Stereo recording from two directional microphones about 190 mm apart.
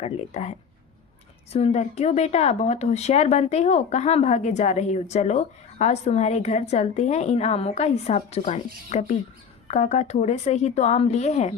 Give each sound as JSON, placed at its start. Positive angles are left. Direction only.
{"t": 0.0, "sound": "speech", "side_deg": 35}
{"t": 1.5, "sound": "speech", "side_deg": 35}